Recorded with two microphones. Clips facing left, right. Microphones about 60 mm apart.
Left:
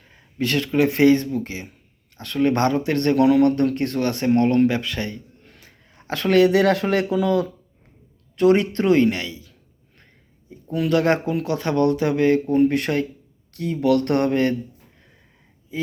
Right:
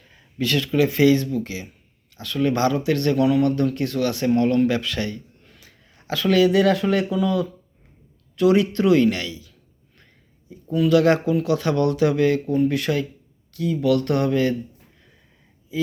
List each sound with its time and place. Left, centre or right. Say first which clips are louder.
0.1 s speech: even; left
3.2 s speech: left 6 dB; left
5.5 s a sound: left 1 dB; left
6.1 s speech: left 1 dB; left
8.4 s speech: left 1 dB; left
9.0 s speech: even; left
10.7 s speech: right 3 dB; left
10.9 s speech: right 2 dB; left
15.7 s speech: right 3 dB; left